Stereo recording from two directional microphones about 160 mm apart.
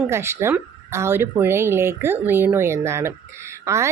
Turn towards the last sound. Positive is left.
turn(degrees=-20)  # may be behind; listen again after turning